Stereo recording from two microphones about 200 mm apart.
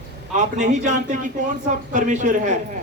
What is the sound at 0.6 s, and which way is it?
A man's voice, 35° right (ahead or behind).